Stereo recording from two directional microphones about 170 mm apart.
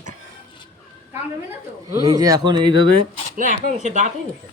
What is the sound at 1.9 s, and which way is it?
A man's voice, 20° right (ahead or behind).